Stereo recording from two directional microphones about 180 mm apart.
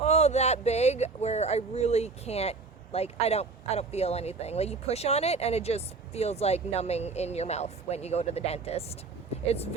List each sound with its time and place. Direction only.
0.0 s speech: 35° left (ahead or behind)